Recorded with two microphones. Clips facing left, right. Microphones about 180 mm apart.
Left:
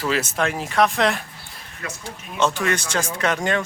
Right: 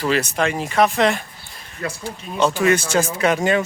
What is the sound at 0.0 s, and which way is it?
Speech, centre (ahead or behind).